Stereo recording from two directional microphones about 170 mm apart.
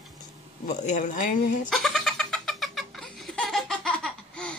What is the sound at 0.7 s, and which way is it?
Speech, 45° left (ahead or behind).